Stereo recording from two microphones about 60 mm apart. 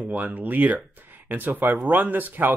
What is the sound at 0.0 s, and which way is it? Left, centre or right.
Speech, right.